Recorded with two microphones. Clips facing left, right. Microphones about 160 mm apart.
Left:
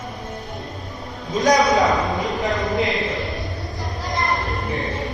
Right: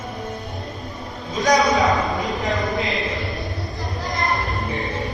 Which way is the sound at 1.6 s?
Centre (ahead or behind).